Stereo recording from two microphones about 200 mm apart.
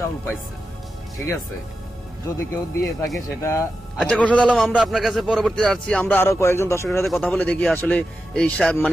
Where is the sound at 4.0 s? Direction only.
Centre (ahead or behind).